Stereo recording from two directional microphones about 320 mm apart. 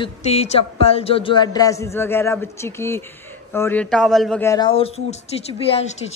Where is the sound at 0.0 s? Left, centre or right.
Centre.